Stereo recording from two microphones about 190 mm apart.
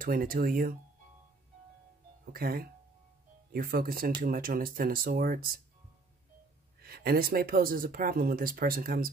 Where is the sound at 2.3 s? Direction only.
50° right (ahead or behind).